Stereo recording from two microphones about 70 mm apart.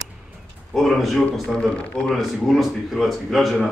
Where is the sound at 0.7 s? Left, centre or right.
Centre.